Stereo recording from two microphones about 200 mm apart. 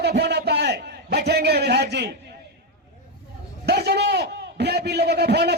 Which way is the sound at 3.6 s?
55° right (ahead or behind).